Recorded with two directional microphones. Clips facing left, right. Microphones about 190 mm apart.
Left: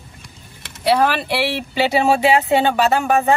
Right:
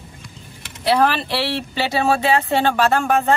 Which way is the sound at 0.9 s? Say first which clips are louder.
Left 1 dB; 10° left (ahead or behind).